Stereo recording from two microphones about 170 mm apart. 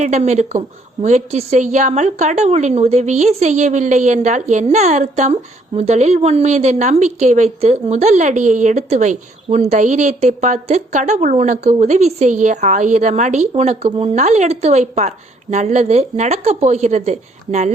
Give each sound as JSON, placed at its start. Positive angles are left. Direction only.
{"t": 0.0, "sound": "a woman's voice", "side_deg": -45}